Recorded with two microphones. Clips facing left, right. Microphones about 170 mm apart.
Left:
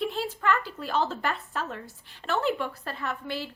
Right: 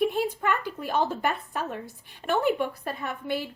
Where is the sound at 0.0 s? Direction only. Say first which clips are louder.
Right 3 dB; 15° right (ahead or behind).